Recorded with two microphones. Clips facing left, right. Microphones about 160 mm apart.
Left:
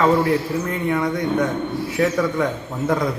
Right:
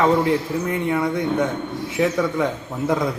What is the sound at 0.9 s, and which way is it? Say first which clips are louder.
Speech: left 2 dB; 5° right (ahead or behind).